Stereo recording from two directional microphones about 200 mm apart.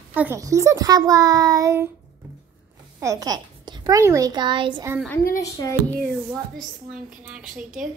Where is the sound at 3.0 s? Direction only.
15° right (ahead or behind).